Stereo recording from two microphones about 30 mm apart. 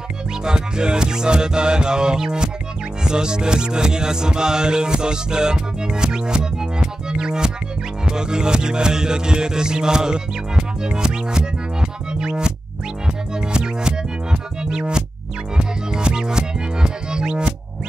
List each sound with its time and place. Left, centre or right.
0.5 s music: right